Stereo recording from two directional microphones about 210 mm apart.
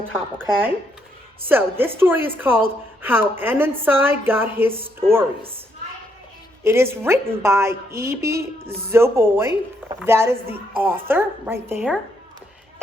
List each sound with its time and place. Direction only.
1.5 s a woman's voice: 10° right (ahead or behind)
6.7 s a woman's voice: 10° right (ahead or behind)